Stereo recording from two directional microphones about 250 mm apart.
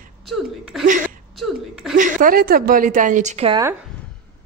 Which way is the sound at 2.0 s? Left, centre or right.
Right.